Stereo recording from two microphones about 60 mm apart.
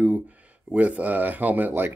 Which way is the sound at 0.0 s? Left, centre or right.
Right.